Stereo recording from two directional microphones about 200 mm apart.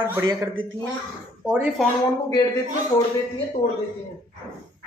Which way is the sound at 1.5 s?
5° right (ahead or behind).